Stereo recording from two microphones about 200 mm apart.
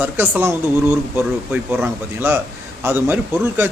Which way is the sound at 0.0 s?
10° right (ahead or behind).